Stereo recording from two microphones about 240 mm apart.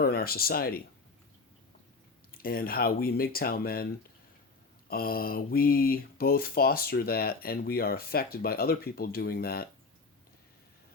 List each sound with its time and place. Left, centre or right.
0.0 s speech: left
2.4 s speech: left
4.9 s speech: left